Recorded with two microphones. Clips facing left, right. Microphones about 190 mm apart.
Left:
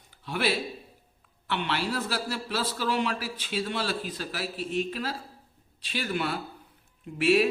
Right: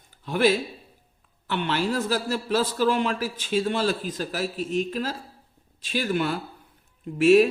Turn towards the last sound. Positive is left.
turn(degrees=-45)  # may be behind; listen again after turning